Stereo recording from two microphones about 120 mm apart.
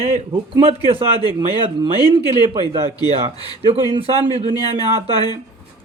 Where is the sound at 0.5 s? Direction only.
50° right (ahead or behind).